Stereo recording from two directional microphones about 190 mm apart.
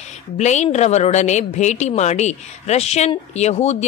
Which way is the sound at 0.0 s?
35° left (ahead or behind).